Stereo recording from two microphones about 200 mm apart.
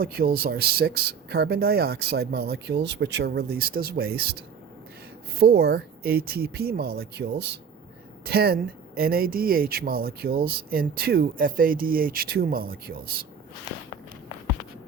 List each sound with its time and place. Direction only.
0.0 s speech: 50° right (ahead or behind)